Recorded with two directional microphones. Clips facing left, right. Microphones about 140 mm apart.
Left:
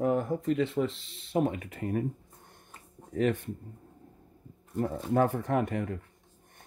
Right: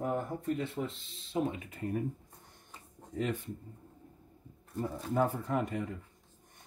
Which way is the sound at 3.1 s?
70° left (ahead or behind).